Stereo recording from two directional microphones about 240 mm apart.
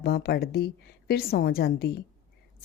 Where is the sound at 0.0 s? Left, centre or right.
Left.